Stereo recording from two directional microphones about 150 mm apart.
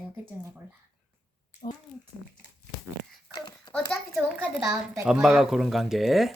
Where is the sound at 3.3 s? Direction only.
25° left (ahead or behind).